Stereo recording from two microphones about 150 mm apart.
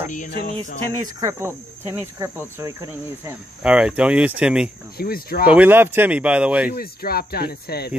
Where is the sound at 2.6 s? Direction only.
20° right (ahead or behind).